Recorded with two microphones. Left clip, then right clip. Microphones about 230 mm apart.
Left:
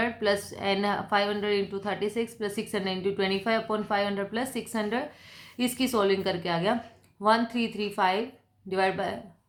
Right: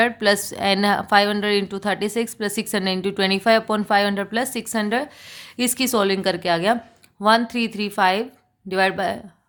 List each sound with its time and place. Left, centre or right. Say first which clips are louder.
0.0 s a woman's voice: right 8 dB; right